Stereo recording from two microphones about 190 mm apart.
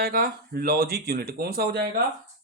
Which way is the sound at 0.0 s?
55° right (ahead or behind).